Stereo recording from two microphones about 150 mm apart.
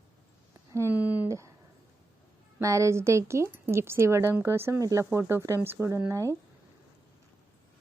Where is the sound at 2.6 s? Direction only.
20° right (ahead or behind).